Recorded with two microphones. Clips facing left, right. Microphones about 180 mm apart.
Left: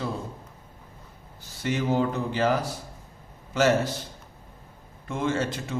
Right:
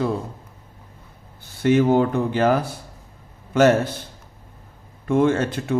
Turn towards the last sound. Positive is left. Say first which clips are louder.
# right 6 dB
turn(degrees=-60)  # may be behind; listen again after turning